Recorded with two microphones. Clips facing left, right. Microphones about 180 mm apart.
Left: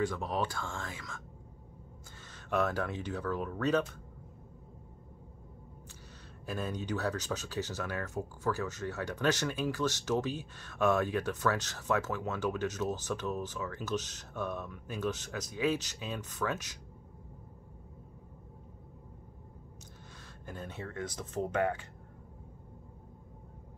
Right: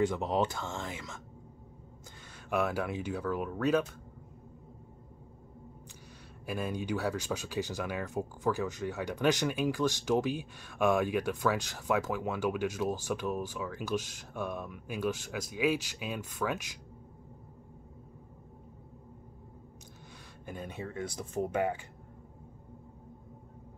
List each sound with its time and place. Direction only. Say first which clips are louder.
0.0 s speech: right 4 dB; 20° right (ahead or behind)
2.3 s speech: even; 10° right (ahead or behind)
6.4 s speech: right 2 dB; 10° right (ahead or behind)
20.4 s speech: right 2 dB; 15° right (ahead or behind)